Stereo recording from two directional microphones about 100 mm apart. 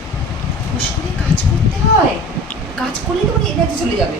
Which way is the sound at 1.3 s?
65° left (ahead or behind).